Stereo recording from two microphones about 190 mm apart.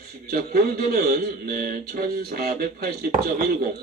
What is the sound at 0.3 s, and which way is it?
Speech, 50° right (ahead or behind).